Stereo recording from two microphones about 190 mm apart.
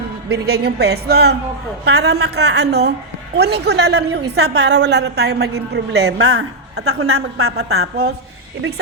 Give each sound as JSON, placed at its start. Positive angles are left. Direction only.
{"t": 0.3, "sound": "a woman's voice", "side_deg": -60}